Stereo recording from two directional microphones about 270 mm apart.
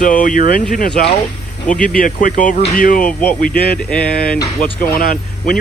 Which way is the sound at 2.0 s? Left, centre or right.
Left.